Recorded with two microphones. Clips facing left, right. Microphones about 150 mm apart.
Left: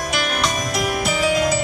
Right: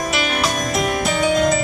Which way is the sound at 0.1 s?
Centre (ahead or behind).